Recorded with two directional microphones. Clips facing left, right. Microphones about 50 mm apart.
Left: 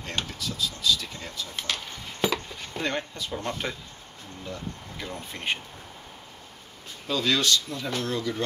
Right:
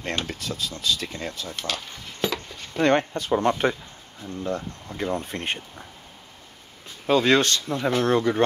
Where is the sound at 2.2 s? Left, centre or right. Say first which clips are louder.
Even; centre.